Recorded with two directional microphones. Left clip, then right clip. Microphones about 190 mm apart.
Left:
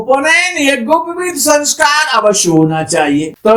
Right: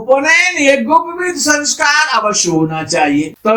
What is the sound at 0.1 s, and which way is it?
Speech, 40° left (ahead or behind).